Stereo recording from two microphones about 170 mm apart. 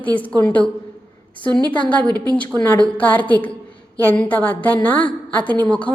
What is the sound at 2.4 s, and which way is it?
A woman's voice, 10° left (ahead or behind).